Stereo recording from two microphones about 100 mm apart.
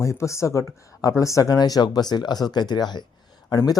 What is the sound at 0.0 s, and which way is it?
Speech, 30° left (ahead or behind).